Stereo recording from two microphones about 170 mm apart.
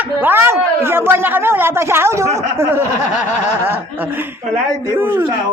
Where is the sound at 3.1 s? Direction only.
45° left (ahead or behind).